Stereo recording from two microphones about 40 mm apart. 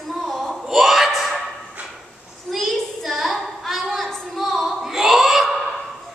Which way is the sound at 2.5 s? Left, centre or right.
Centre.